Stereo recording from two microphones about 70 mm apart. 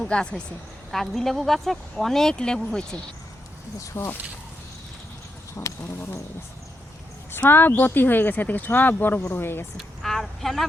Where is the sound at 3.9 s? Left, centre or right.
Left.